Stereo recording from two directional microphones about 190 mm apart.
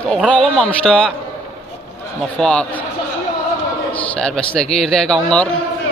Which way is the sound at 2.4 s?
5° left (ahead or behind).